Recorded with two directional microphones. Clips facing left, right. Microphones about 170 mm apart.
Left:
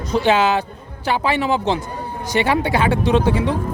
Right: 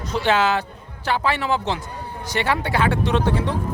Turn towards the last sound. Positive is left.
turn(degrees=10)  # may be behind; listen again after turning